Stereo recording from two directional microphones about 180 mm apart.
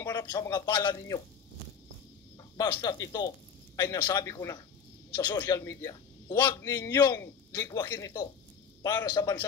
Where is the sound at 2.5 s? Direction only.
20° left (ahead or behind).